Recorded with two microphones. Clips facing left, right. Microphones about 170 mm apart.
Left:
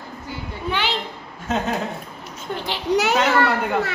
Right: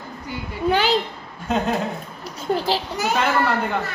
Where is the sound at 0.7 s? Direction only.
40° right (ahead or behind).